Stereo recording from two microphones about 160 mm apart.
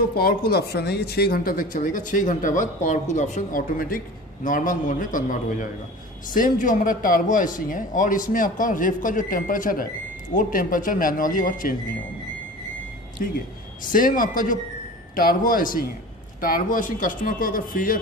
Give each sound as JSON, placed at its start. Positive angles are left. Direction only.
{"t": 0.1, "sound": "speech", "side_deg": 70}
{"t": 13.9, "sound": "speech", "side_deg": 60}